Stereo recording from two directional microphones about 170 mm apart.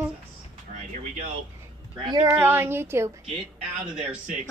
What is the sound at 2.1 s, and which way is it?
Speech, 20° right (ahead or behind).